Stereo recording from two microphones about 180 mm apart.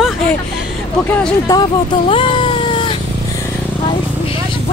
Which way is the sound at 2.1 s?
30° left (ahead or behind).